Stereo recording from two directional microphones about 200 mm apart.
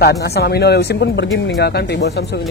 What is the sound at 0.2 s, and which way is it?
Speech, 55° left (ahead or behind).